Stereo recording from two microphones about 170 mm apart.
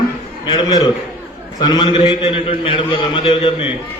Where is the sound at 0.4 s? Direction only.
25° left (ahead or behind).